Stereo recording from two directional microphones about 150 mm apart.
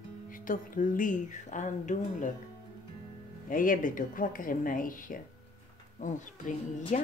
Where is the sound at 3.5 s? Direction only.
65° left (ahead or behind).